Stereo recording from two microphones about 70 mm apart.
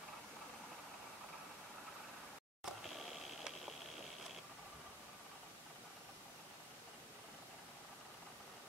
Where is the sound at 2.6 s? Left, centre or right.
Centre.